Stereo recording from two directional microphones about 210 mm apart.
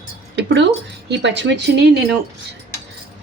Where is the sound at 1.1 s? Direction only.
60° right (ahead or behind).